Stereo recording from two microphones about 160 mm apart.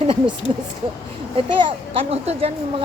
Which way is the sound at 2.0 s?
40° right (ahead or behind).